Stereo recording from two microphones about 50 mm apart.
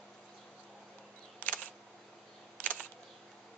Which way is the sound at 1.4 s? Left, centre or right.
Left.